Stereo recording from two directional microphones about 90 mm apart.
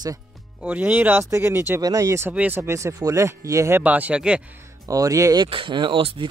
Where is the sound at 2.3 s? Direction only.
20° right (ahead or behind).